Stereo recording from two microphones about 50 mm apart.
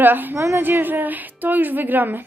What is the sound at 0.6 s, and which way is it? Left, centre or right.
A woman's voice, right.